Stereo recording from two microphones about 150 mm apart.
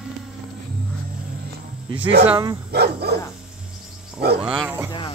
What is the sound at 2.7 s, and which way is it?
Dog, 90° right.